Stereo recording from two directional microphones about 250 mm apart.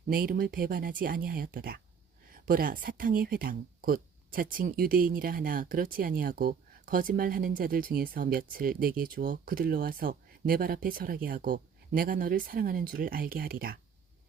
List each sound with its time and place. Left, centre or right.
0.1 s speech: right